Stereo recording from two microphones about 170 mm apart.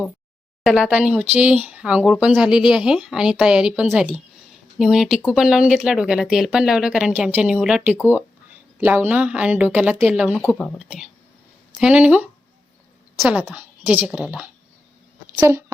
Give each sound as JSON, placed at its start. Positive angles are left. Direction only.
{"t": 0.6, "sound": "a woman's voice", "side_deg": 0}
{"t": 10.4, "sound": "speech", "side_deg": 15}
{"t": 10.8, "sound": "a woman's voice", "side_deg": -5}